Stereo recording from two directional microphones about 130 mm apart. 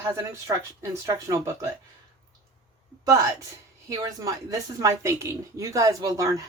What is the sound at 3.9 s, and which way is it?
A woman's voice, 25° right (ahead or behind).